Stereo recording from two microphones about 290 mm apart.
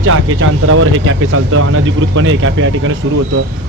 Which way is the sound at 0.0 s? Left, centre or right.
Right.